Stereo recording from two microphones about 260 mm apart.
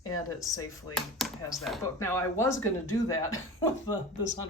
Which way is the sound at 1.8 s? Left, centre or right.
Centre.